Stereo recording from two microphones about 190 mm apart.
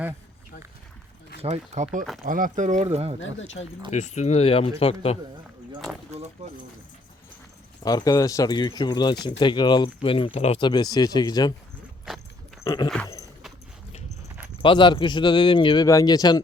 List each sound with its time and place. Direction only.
1.4 s speech: 35° right (ahead or behind)
3.2 s speech: 85° left
3.9 s speech: 35° left (ahead or behind)
7.9 s speech: 20° left (ahead or behind)
12.0 s horse: centre (ahead or behind)
12.6 s a sound: 20° left (ahead or behind)
14.6 s speech: 25° left (ahead or behind)